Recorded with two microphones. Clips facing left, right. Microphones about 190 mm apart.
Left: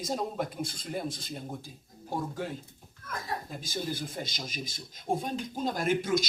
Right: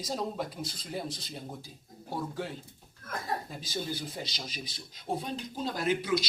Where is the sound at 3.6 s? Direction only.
50° left (ahead or behind).